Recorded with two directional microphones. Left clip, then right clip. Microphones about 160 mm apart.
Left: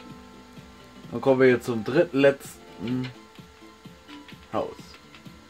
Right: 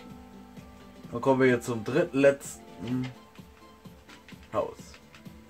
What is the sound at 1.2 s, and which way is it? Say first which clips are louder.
Speech: left 4 dB; 35° left (ahead or behind).